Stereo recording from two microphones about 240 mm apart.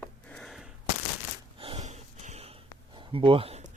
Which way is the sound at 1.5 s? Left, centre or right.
Right.